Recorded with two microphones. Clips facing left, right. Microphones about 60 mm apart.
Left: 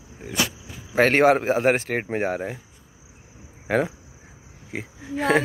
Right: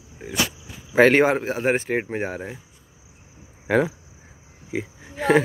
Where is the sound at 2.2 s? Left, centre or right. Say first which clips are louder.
Left 3 dB; centre.